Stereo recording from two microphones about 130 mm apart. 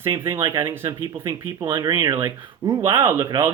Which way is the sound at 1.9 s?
25° right (ahead or behind).